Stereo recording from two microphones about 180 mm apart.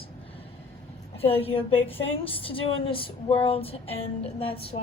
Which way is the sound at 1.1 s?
35° left (ahead or behind).